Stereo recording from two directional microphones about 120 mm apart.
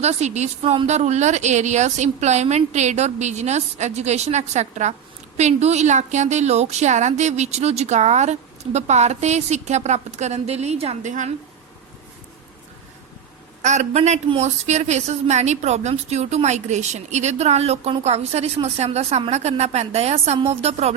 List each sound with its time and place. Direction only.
0.0 s a woman's voice: 70° right (ahead or behind); by 11.3 s 90° right
13.6 s a woman's voice: 75° right (ahead or behind)